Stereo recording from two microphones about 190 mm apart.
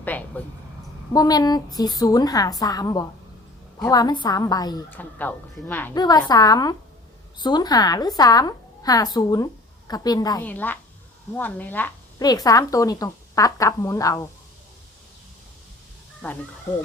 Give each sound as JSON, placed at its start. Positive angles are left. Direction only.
{"t": 0.0, "sound": "a sound", "side_deg": 10}
{"t": 1.1, "sound": "a woman's voice", "side_deg": 20}
{"t": 4.9, "sound": "speech", "side_deg": 10}
{"t": 6.0, "sound": "a woman's voice", "side_deg": 20}
{"t": 10.4, "sound": "speech", "side_deg": 10}
{"t": 12.2, "sound": "speech", "side_deg": 20}